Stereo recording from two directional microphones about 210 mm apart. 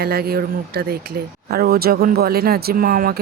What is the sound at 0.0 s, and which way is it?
Speech, 45° right (ahead or behind).